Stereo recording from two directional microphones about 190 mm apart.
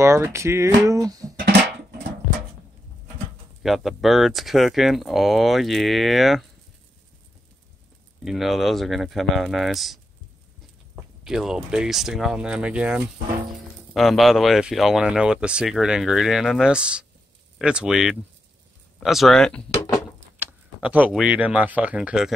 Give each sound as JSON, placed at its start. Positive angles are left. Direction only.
{"t": 0.0, "sound": "speech", "side_deg": -15}
{"t": 3.6, "sound": "speech", "side_deg": 0}
{"t": 8.2, "sound": "speech", "side_deg": 0}
{"t": 11.2, "sound": "speech", "side_deg": -5}
{"t": 19.7, "sound": "a sound", "side_deg": 15}
{"t": 20.0, "sound": "speech", "side_deg": -5}